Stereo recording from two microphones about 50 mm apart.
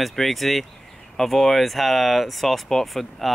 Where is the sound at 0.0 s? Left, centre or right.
Centre.